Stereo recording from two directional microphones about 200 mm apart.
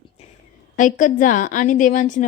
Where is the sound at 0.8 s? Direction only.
40° left (ahead or behind).